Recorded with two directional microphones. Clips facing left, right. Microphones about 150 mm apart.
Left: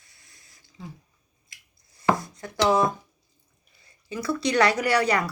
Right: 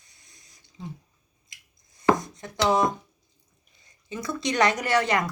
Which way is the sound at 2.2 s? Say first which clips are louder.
Left 2 dB; 20° right (ahead or behind).